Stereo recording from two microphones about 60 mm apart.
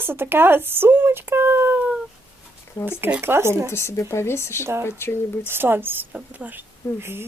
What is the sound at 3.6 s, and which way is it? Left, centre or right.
Speech, left.